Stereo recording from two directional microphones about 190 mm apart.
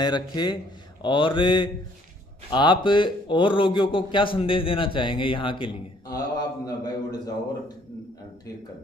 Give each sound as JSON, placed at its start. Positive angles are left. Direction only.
{"t": 0.0, "sound": "speech", "side_deg": 25}